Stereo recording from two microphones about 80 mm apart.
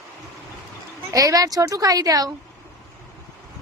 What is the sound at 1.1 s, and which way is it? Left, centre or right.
A woman's voice, right.